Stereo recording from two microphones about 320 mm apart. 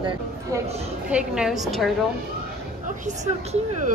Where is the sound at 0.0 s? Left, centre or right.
Centre.